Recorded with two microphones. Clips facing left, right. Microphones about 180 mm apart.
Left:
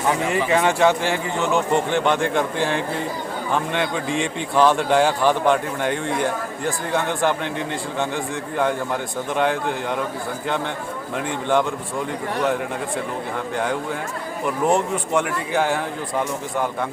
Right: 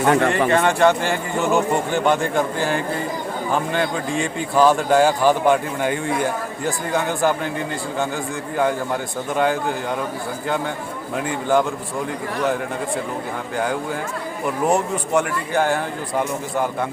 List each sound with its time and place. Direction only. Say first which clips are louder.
0.1 s speech: right 4 dB; 65° right (ahead or behind)
0.5 s speech: left 1 dB; 5° left (ahead or behind)
11.2 s speech: right 2 dB; 5° right (ahead or behind)
14.4 s speech: even; centre (ahead or behind)